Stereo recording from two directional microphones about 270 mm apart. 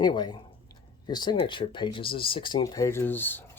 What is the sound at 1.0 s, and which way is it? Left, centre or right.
Speech, centre.